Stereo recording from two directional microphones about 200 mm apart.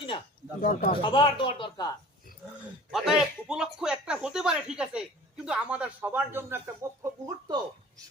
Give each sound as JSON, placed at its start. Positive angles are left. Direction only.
{"t": 0.6, "sound": "speech", "side_deg": 45}
{"t": 1.0, "sound": "speech", "side_deg": 25}
{"t": 2.9, "sound": "speech", "side_deg": 0}